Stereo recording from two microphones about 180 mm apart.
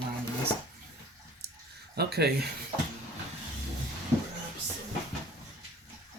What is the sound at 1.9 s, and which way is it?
Speech, 65° right (ahead or behind).